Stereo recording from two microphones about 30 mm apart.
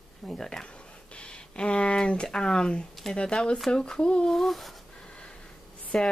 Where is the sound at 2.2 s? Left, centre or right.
Left.